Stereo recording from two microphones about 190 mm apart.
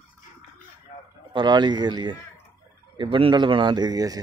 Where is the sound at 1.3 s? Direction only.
25° right (ahead or behind).